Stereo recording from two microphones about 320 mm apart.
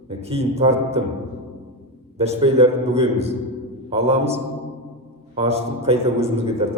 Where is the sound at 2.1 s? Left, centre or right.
Centre.